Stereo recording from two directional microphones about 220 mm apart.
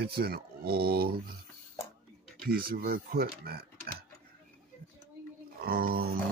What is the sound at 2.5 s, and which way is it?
Speech, 40° right (ahead or behind).